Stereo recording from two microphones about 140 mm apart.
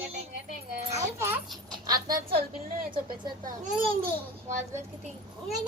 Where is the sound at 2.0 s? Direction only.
90° right.